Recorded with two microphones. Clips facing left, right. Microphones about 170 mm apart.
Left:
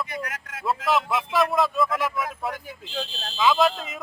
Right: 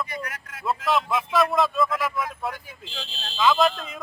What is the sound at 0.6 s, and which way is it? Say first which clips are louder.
Speech: even; centre (ahead or behind).